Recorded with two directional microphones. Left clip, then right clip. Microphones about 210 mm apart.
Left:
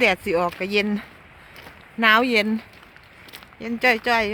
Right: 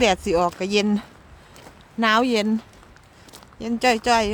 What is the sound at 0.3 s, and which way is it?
Speech, 20° right (ahead or behind).